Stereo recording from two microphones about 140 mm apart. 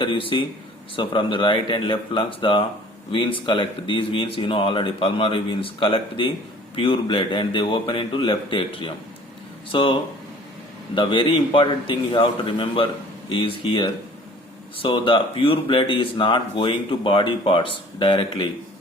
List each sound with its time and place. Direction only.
0.0 s speech: 40° left (ahead or behind)